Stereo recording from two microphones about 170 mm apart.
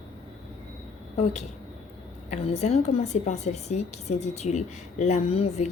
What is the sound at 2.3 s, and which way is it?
A woman's voice, 40° left (ahead or behind).